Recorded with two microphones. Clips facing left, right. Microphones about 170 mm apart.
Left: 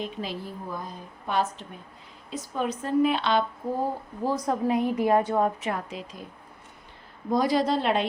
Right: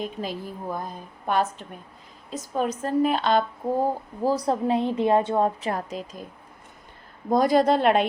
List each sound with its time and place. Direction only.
0.0 s a woman's voice: 45° right (ahead or behind)
7.3 s speech: 50° right (ahead or behind)